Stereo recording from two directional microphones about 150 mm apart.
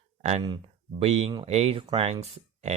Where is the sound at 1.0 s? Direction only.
45° right (ahead or behind).